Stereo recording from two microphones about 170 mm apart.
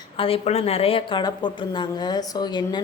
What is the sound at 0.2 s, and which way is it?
A woman's voice, 35° left (ahead or behind).